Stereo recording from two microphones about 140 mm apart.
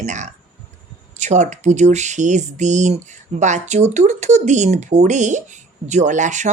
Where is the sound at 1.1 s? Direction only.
55° right (ahead or behind).